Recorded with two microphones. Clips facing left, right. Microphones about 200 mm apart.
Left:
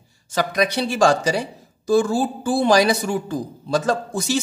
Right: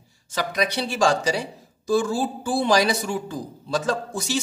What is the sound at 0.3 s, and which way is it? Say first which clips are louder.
Speech: left 4 dB; 50° left (ahead or behind).